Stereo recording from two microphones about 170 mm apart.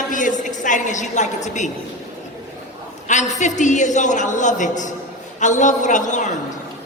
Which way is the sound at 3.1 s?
45° left (ahead or behind).